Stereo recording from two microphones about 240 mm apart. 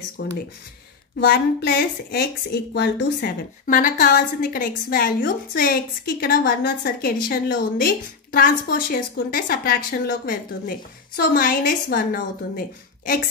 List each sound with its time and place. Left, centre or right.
0.2 s a woman's voice: left